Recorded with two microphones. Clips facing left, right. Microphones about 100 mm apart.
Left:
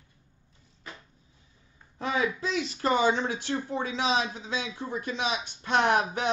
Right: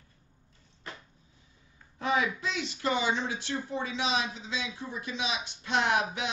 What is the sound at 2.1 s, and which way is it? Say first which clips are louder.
Speech: left 4 dB; 30° left (ahead or behind).